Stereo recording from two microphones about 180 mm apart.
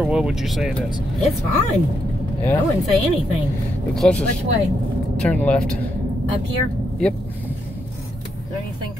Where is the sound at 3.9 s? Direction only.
5° left (ahead or behind).